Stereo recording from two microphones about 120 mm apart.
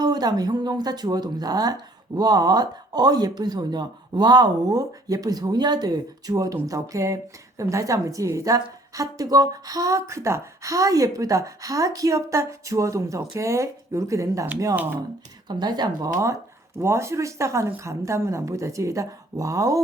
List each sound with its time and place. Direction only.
0.0 s a woman's voice: 35° right (ahead or behind)
15.4 s a woman's voice: 35° right (ahead or behind)